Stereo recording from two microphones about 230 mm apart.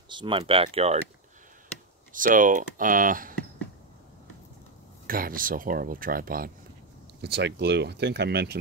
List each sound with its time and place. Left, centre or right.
0.1 s speech: right
2.1 s speech: right
5.0 s speech: right